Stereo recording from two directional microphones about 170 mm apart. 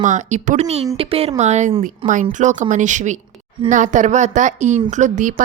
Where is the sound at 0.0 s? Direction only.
45° right (ahead or behind).